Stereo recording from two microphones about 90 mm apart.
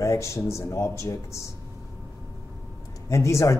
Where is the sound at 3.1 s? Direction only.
35° left (ahead or behind).